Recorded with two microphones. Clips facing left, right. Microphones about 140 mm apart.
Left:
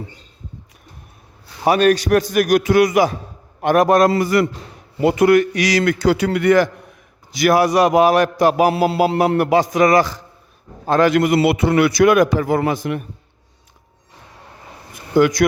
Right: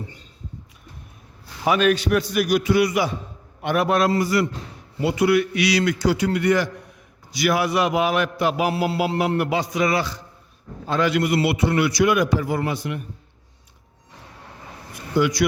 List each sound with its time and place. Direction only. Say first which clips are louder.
1.6 s a man's voice: left 4 dB; 40° left (ahead or behind)
4.1 s a man's voice: left 4 dB; 60° left (ahead or behind)
7.3 s a man's voice: left 6 dB; 45° left (ahead or behind)
8.7 s music: left 5 dB; 75° left (ahead or behind)
9.0 s a man's voice: left 6 dB; 40° left (ahead or behind)
15.1 s a man's voice: left 6 dB; 50° left (ahead or behind)